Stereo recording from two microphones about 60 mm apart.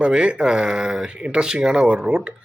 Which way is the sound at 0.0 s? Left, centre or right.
Centre.